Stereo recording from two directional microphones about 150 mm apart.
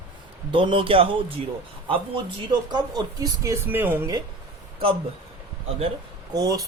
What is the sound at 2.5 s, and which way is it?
Speech, 30° right (ahead or behind).